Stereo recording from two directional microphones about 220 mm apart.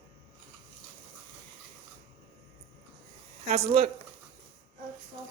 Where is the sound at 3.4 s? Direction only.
30° right (ahead or behind).